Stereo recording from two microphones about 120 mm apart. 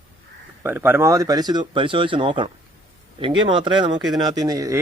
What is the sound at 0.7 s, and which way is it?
Speech, 20° right (ahead or behind).